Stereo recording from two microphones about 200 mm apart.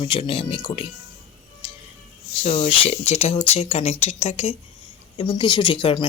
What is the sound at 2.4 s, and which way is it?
Speech, 30° left (ahead or behind).